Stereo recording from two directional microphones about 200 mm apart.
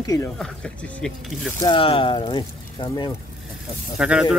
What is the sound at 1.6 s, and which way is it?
Speech, 25° left (ahead or behind).